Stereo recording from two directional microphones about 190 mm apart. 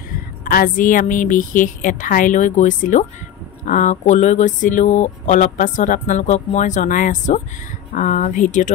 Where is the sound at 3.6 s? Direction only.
40° left (ahead or behind).